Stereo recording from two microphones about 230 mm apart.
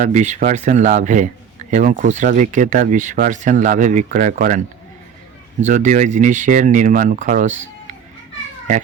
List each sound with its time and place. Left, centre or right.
0.0 s speech: right
5.6 s speech: right